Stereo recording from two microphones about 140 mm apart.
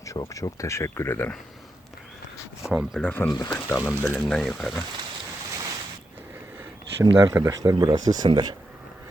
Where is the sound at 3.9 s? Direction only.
10° right (ahead or behind).